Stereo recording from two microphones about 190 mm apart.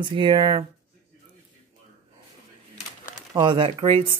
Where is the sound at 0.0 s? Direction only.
25° right (ahead or behind).